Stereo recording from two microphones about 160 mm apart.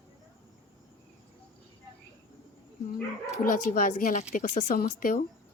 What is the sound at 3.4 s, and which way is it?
Speech, 60° left (ahead or behind).